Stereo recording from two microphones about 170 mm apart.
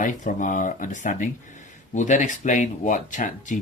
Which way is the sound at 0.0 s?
50° left (ahead or behind).